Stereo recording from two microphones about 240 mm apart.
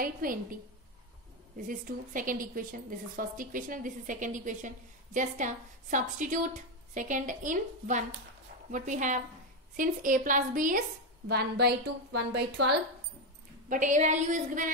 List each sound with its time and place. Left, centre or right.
0.0 s a woman's voice: right
1.7 s a woman's voice: right
13.7 s a woman's voice: right